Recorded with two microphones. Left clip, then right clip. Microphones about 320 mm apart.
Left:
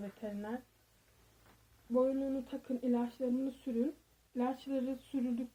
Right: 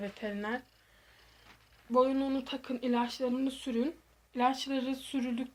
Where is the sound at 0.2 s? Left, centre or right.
Right.